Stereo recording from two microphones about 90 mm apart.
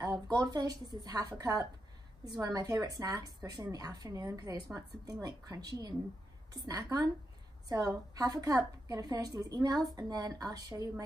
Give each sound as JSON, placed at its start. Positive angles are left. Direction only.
{"t": 0.0, "sound": "a woman's voice", "side_deg": -50}